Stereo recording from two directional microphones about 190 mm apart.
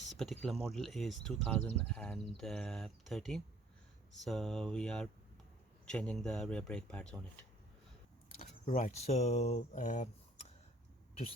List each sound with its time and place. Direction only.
0.1 s speech: centre (ahead or behind)
8.4 s speech: 35° left (ahead or behind)